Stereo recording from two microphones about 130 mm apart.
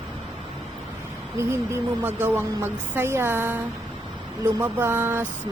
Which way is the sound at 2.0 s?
15° right (ahead or behind).